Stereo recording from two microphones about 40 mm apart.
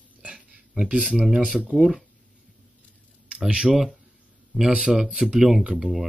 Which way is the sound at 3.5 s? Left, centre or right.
Right.